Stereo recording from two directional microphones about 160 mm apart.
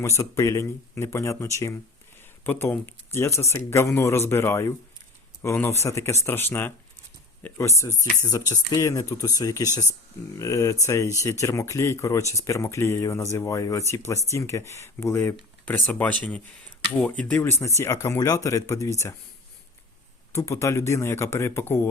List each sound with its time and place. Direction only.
0.0 s speech: 20° left (ahead or behind)
20.3 s speech: 20° left (ahead or behind)